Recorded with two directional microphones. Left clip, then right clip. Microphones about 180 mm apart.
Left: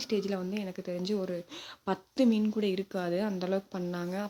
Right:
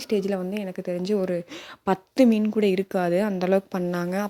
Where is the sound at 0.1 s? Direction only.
30° right (ahead or behind).